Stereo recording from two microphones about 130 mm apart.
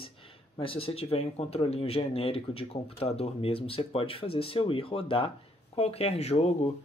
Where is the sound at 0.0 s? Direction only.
45° left (ahead or behind).